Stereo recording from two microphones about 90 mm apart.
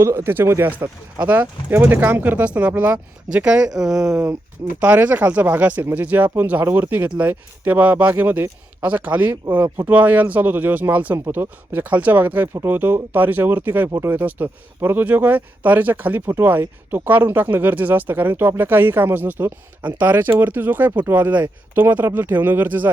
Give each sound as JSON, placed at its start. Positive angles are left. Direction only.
{"t": 0.0, "sound": "speech", "side_deg": -30}
{"t": 4.8, "sound": "speech", "side_deg": -20}
{"t": 14.2, "sound": "speech", "side_deg": -20}